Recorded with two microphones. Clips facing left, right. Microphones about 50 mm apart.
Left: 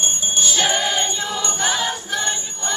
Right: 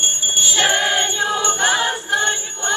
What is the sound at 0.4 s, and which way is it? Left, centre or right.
Music, right.